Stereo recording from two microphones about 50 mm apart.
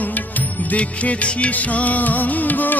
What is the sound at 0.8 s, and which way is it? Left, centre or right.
Music, left.